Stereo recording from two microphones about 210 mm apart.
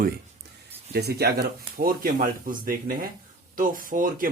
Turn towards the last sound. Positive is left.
turn(degrees=-40)  # may be behind; listen again after turning